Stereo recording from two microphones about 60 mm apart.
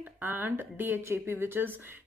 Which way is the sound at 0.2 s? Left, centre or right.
Right.